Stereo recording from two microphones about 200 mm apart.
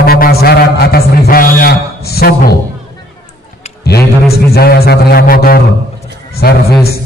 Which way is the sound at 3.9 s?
50° left (ahead or behind).